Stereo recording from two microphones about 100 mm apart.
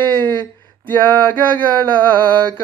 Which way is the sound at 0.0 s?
20° left (ahead or behind).